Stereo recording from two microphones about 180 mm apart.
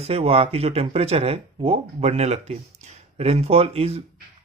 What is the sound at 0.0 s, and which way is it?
Speech, 35° right (ahead or behind).